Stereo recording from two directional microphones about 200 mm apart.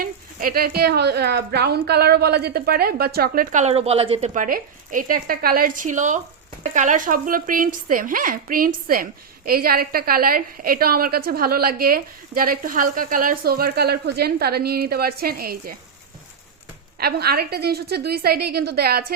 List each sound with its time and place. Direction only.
0.0 s speech: 45° right (ahead or behind); by 4.4 s 30° right (ahead or behind)
4.4 s speech: 45° right (ahead or behind)
17.0 s speech: 50° right (ahead or behind)